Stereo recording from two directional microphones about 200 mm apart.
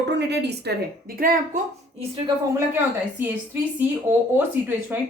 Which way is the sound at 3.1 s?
10° right (ahead or behind).